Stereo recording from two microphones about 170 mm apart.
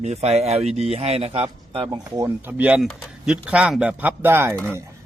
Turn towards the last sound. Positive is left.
turn(degrees=-15)  # may be behind; listen again after turning